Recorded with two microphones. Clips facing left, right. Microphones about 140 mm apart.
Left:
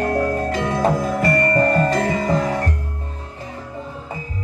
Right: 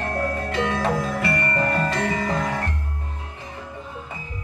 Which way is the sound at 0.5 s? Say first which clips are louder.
Left 1 dB; 40° left (ahead or behind).